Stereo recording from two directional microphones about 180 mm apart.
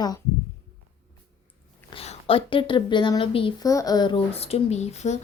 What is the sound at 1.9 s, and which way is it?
A woman's voice, 30° left (ahead or behind).